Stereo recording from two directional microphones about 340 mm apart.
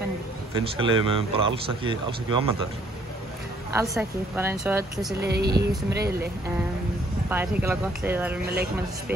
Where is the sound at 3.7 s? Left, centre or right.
Centre.